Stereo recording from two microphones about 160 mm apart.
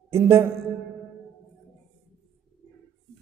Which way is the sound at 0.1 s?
15° right (ahead or behind).